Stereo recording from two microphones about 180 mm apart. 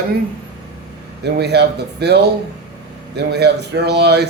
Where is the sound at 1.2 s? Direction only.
65° right (ahead or behind).